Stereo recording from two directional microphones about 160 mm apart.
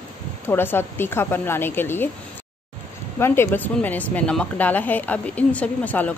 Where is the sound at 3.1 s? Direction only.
15° left (ahead or behind).